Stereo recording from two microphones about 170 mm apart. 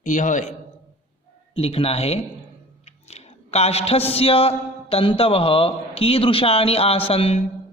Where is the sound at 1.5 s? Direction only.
35° left (ahead or behind).